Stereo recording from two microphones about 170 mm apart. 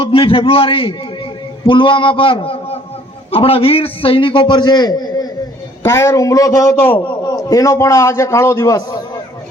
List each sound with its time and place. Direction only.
0.0 s a man's voice: 30° left (ahead or behind); by 6.9 s 15° left (ahead or behind)
6.9 s a man's voice: 30° left (ahead or behind)